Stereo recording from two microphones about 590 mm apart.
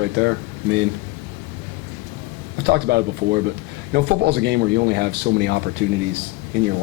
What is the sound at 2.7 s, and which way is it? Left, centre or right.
Speech, centre.